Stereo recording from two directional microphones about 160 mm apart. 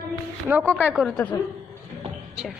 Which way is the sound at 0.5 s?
10° right (ahead or behind).